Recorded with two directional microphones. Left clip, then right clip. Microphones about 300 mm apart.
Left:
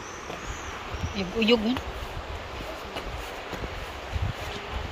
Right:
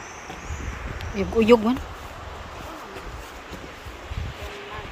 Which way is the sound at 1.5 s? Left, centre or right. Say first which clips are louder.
Right 8 dB; right.